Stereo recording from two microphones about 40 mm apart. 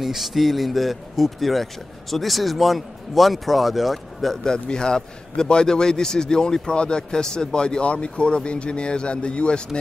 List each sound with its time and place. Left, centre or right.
0.0 s speech: centre
4.5 s a man's voice: centre